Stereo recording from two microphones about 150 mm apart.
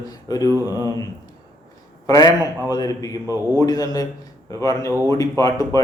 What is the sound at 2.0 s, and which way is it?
Speech, 25° left (ahead or behind).